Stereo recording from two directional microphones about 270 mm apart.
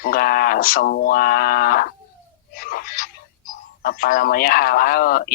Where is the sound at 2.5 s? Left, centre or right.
Left.